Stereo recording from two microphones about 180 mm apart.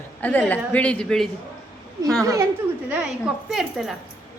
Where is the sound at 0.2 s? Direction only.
10° left (ahead or behind).